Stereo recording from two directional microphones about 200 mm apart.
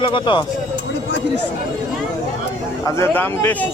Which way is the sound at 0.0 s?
25° left (ahead or behind).